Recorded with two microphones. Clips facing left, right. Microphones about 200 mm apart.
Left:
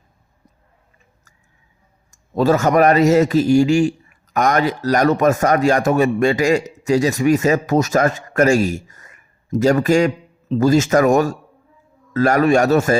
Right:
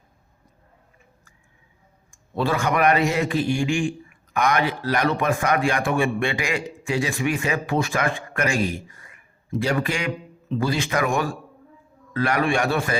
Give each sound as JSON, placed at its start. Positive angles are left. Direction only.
{"t": 2.0, "sound": "a man's voice", "side_deg": 40}